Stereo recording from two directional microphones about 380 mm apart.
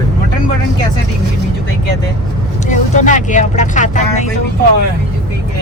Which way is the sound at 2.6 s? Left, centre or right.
Centre.